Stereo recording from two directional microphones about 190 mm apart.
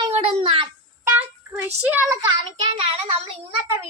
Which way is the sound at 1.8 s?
10° right (ahead or behind).